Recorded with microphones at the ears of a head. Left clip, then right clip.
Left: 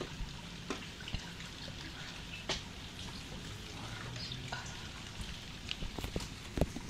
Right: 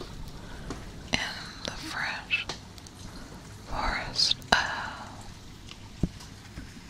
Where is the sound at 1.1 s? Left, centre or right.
Right.